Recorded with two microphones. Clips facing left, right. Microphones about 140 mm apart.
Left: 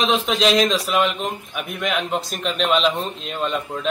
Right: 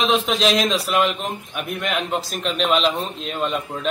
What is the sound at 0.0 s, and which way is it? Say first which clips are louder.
A man's voice: even; centre (ahead or behind).